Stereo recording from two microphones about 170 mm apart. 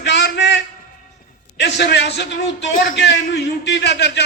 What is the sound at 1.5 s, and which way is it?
A man's voice, 90° left.